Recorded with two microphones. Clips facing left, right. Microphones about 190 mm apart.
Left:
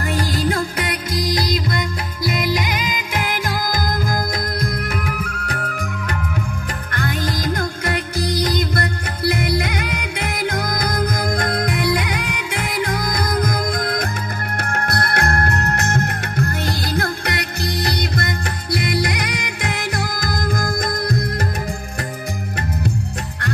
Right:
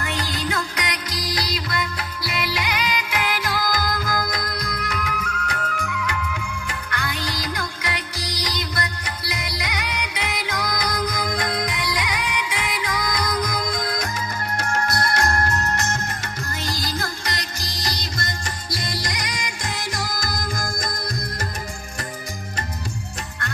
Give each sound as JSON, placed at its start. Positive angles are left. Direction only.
{"t": 0.0, "sound": "music", "side_deg": 35}
{"t": 0.8, "sound": "music", "side_deg": 50}
{"t": 5.0, "sound": "music", "side_deg": 30}